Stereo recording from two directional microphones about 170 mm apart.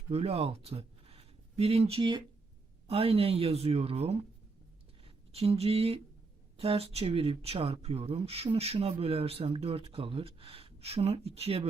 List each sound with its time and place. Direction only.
0.1 s speech: 35° right (ahead or behind)